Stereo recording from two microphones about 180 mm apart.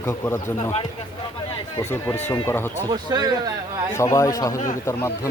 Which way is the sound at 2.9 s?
25° right (ahead or behind).